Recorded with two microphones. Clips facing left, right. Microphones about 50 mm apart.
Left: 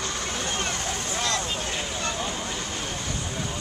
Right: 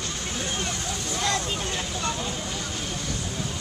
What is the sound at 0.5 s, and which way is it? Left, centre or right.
Speech, left.